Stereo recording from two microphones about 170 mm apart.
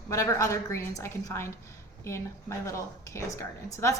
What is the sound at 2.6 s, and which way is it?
Speech, 15° left (ahead or behind).